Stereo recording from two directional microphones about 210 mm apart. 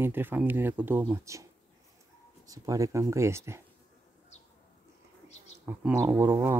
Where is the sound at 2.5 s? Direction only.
15° right (ahead or behind).